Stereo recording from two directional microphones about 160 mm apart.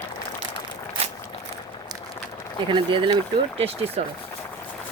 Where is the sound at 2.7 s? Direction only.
30° right (ahead or behind).